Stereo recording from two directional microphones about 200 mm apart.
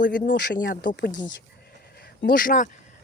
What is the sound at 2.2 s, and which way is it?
Speech, 45° left (ahead or behind).